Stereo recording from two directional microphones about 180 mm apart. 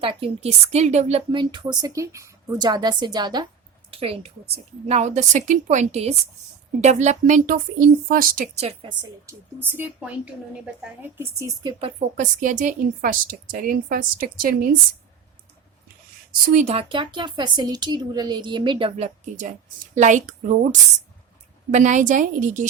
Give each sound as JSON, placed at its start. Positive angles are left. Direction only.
{"t": 0.0, "sound": "a woman's voice", "side_deg": -30}
{"t": 8.5, "sound": "a woman's voice", "side_deg": -30}
{"t": 9.2, "sound": "speech", "side_deg": -10}
{"t": 11.8, "sound": "speech", "side_deg": -40}
{"t": 16.5, "sound": "a woman's voice", "side_deg": -40}
{"t": 21.7, "sound": "speech", "side_deg": -40}